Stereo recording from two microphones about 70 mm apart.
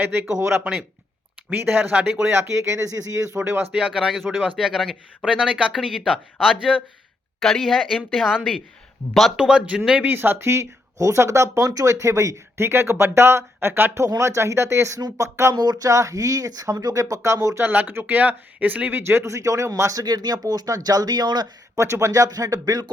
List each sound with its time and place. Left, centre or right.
0.0 s speech: right
1.5 s speech: right
2.3 s speech: right
3.7 s speech: centre
4.1 s speech: centre
5.3 s speech: centre
7.4 s speech: centre
9.4 s speech: centre
10.0 s speech: right
14.2 s speech: right
15.5 s speech: right
17.6 s speech: right
20.0 s speech: right
21.8 s speech: right